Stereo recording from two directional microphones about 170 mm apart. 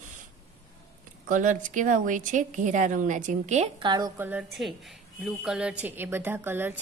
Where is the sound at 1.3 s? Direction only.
50° right (ahead or behind).